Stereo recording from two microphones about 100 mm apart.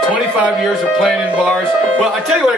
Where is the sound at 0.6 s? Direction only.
Centre (ahead or behind).